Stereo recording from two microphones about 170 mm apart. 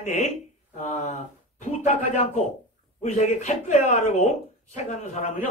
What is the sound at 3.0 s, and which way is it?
Speech, 40° left (ahead or behind).